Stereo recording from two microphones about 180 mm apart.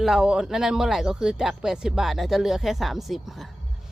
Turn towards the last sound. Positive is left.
turn(degrees=0)  # may be behind; listen again after turning